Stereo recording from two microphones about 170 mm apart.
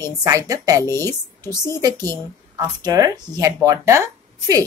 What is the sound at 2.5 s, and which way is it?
Speech, 20° right (ahead or behind).